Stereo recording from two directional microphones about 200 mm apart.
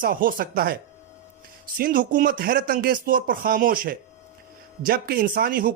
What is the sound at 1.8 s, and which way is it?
Speech, 45° right (ahead or behind).